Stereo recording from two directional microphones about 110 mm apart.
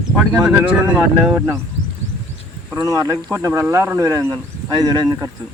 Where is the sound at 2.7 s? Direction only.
30° right (ahead or behind).